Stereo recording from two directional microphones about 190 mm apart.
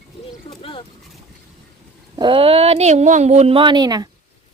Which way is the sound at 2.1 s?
25° right (ahead or behind).